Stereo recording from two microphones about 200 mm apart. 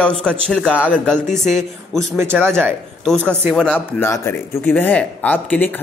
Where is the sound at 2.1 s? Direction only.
10° right (ahead or behind).